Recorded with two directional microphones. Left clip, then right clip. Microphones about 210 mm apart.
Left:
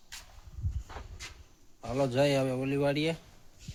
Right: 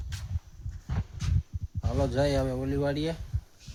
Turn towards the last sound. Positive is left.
turn(degrees=0)  # may be behind; listen again after turning